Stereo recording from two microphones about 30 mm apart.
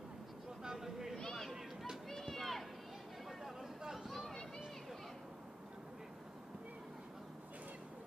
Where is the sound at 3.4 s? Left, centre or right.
Centre.